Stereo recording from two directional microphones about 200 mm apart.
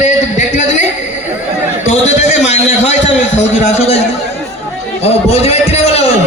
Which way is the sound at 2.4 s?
35° left (ahead or behind).